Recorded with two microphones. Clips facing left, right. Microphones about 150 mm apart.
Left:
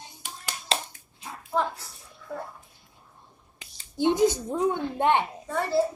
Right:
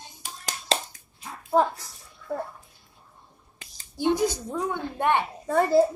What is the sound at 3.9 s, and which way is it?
A woman's voice, 20° left (ahead or behind).